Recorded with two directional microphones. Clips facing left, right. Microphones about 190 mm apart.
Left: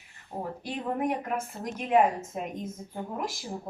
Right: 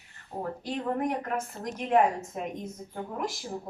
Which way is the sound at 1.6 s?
5° left (ahead or behind).